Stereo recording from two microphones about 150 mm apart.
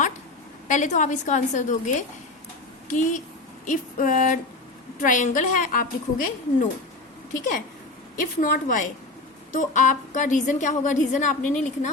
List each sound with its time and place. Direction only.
0.7 s a woman's voice: 55° left (ahead or behind)
3.7 s a woman's voice: 60° left (ahead or behind)
8.1 s a woman's voice: 70° left (ahead or behind); by 11.9 s 55° left (ahead or behind)